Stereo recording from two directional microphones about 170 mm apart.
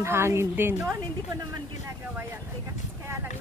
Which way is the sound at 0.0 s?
15° right (ahead or behind).